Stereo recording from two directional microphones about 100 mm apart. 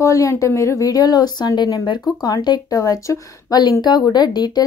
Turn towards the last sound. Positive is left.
turn(degrees=45)  # may be behind; listen again after turning